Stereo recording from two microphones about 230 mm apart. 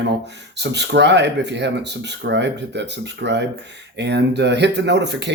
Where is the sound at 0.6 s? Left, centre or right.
Right.